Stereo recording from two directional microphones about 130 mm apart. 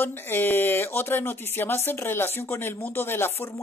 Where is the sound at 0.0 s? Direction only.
15° left (ahead or behind).